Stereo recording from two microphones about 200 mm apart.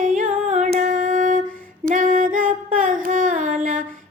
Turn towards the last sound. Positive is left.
turn(degrees=-40)  # may be behind; listen again after turning